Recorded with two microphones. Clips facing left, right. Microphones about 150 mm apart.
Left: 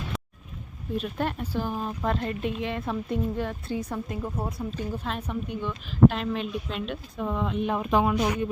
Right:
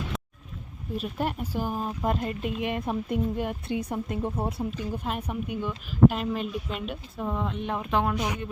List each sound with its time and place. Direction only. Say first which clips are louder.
0.9 s a woman's voice: left 1 dB; 5° right (ahead or behind); by 4.6 s 30° right (ahead or behind)
4.9 s a woman's voice: right 1 dB; 10° right (ahead or behind)
7.8 s speech: left 2 dB; 10° left (ahead or behind)